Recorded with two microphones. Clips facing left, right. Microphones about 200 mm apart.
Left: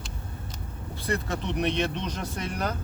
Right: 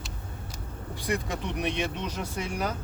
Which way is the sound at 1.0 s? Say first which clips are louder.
Left 1 dB; 15° right (ahead or behind).